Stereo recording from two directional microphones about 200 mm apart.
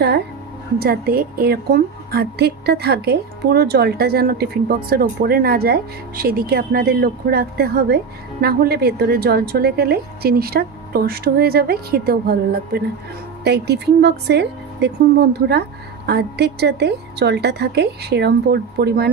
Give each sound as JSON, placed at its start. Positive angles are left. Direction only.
{"t": 0.7, "sound": "a woman's voice", "side_deg": -50}